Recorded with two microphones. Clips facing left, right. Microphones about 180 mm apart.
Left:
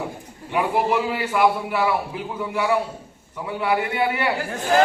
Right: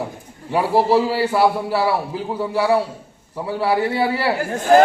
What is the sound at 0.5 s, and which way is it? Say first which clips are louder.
A man's voice: right 5 dB; 30° right (ahead or behind).